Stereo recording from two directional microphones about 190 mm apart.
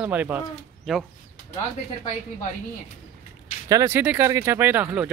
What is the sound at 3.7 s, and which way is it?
Speech, 15° right (ahead or behind).